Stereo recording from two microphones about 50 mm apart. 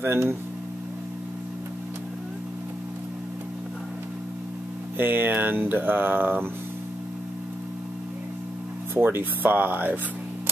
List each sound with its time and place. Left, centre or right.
0.0 s speech: right
4.9 s speech: right
8.9 s speech: right